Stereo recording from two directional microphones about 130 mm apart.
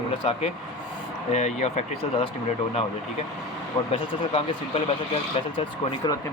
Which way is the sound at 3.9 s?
45° left (ahead or behind).